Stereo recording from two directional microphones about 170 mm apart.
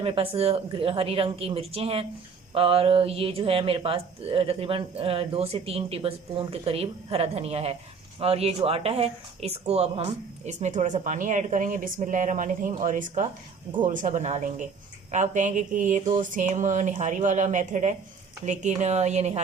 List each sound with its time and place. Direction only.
0.0 s speech: 35° right (ahead or behind)